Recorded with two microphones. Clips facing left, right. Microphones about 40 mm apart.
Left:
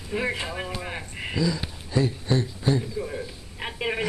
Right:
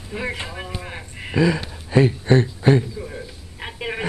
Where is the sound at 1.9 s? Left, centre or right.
Right.